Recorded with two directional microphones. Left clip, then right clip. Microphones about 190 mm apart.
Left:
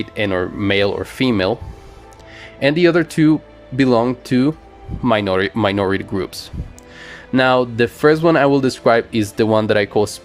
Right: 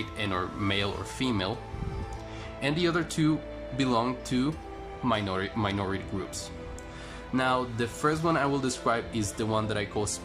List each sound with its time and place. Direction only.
0.2 s speech: 35° left (ahead or behind)
2.6 s speech: 40° left (ahead or behind)
7.3 s speech: 45° left (ahead or behind)